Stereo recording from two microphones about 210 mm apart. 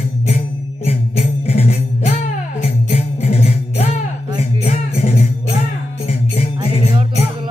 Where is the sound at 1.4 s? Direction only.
30° left (ahead or behind).